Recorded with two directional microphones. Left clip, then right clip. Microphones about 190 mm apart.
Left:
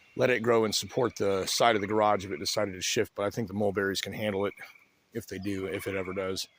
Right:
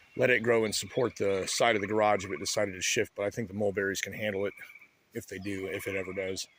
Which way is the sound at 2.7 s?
30° left (ahead or behind).